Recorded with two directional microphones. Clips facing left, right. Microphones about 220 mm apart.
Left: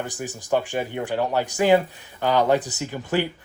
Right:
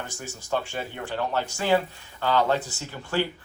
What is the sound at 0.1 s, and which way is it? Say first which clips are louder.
Speech: left 4 dB; 15° left (ahead or behind).